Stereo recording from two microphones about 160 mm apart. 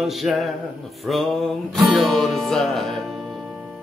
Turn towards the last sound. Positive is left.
turn(degrees=0)  # may be behind; listen again after turning